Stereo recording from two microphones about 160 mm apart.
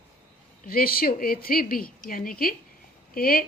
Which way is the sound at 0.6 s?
65° left (ahead or behind).